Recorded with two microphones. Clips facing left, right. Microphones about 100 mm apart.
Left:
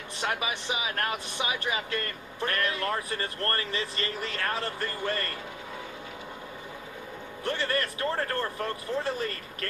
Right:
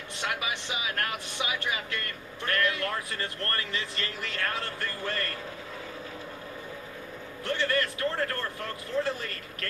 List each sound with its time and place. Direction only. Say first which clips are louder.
0.2 s speech: left 2 dB; 30° left (ahead or behind)
7.4 s speech: right 1 dB; 25° left (ahead or behind)